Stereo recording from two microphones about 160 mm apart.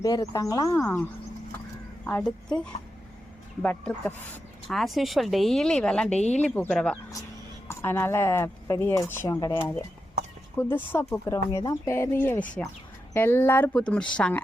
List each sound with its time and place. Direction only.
0.0 s speech: 20° left (ahead or behind)
2.0 s speech: 5° left (ahead or behind)
6.1 s speech: 45° left (ahead or behind)
6.4 s speech: 5° left (ahead or behind)
10.6 s speech: 15° left (ahead or behind)